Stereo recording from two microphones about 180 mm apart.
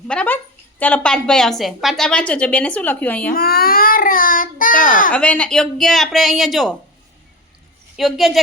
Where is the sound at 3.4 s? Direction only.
55° left (ahead or behind).